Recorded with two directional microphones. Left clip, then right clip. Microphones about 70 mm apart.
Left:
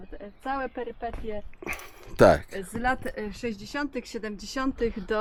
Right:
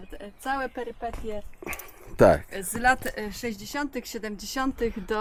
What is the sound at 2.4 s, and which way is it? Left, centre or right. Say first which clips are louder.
Speech: right 5 dB; right.